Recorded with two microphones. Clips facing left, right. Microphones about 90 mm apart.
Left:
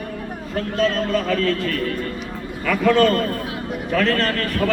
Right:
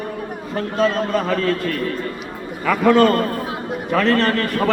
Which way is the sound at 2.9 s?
25° right (ahead or behind).